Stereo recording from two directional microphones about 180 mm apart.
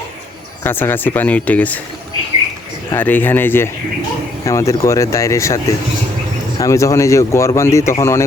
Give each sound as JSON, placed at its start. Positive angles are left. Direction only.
{"t": 0.6, "sound": "speech", "side_deg": 10}
{"t": 2.9, "sound": "speech", "side_deg": 10}